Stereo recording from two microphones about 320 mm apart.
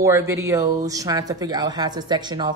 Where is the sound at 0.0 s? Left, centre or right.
Centre.